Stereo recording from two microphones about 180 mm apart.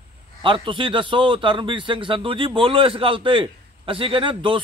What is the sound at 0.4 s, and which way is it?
A man's voice, 30° right (ahead or behind).